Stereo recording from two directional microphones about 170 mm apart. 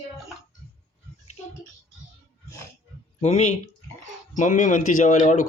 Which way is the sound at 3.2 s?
40° left (ahead or behind).